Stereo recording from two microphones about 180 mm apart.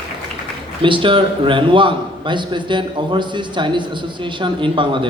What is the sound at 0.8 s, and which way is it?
A man's voice, 30° right (ahead or behind).